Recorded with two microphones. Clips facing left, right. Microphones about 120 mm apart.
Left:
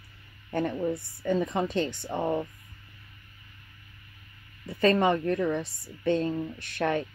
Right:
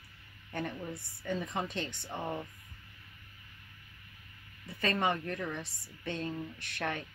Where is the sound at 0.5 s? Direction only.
35° left (ahead or behind).